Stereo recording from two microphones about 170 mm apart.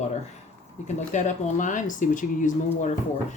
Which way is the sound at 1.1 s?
45° left (ahead or behind).